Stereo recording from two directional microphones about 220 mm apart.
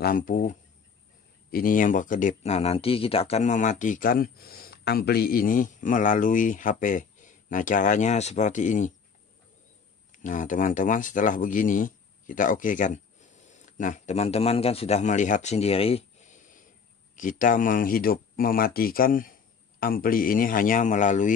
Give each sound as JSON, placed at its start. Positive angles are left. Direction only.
{"t": 0.0, "sound": "speech", "side_deg": 40}
{"t": 10.1, "sound": "speech", "side_deg": 35}